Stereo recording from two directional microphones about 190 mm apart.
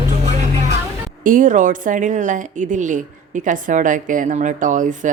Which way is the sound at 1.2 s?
45° right (ahead or behind).